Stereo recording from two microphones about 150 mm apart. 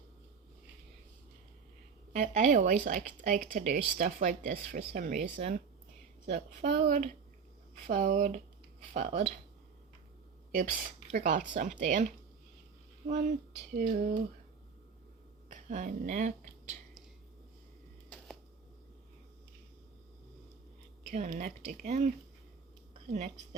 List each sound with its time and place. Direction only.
2.1 s speech: 50° right (ahead or behind)
6.2 s a woman's voice: 45° right (ahead or behind)
6.7 s speech: 70° right (ahead or behind)
7.9 s speech: 55° right (ahead or behind)
9.0 s speech: 40° right (ahead or behind)
10.5 s speech: 65° right (ahead or behind)
13.1 s speech: 60° right (ahead or behind)
15.4 s speech: 60° right (ahead or behind)
21.1 s speech: 55° right (ahead or behind)
23.1 s a woman's voice: 50° right (ahead or behind)